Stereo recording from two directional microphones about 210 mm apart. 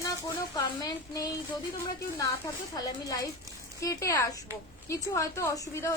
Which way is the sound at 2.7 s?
20° left (ahead or behind).